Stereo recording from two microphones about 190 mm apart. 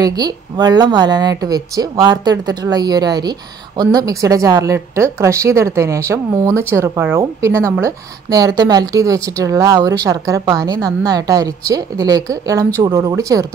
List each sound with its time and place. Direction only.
0.0 s speech: 20° right (ahead or behind)